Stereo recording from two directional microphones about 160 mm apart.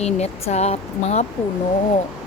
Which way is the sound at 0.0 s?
45° left (ahead or behind).